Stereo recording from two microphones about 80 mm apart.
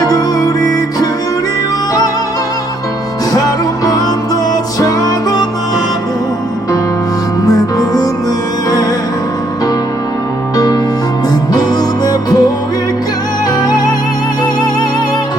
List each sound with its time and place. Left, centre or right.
0.1 s music: left
4.8 s music: left
7.5 s music: left
12.0 s music: left